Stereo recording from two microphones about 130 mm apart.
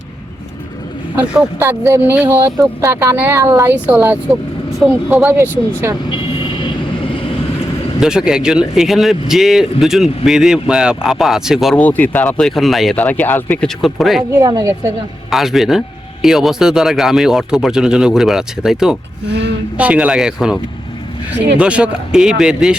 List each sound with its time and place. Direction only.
1.1 s speech: 10° right (ahead or behind)
1.5 s speech: 20° right (ahead or behind)
5.2 s speech: 20° right (ahead or behind)
6.1 s train: 40° left (ahead or behind)
8.0 s speech: 5° right (ahead or behind)
11.8 s speech: 15° left (ahead or behind)
13.0 s speech: 10° left (ahead or behind)
13.8 s speech: centre (ahead or behind)
14.3 s speech: 30° right (ahead or behind)
15.3 s speech: centre (ahead or behind)
21.6 s speech: 10° right (ahead or behind)